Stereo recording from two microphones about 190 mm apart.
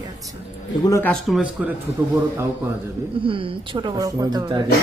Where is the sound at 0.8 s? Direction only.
15° left (ahead or behind).